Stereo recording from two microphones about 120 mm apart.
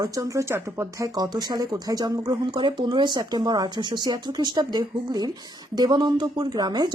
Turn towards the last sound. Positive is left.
turn(degrees=-35)  # may be behind; listen again after turning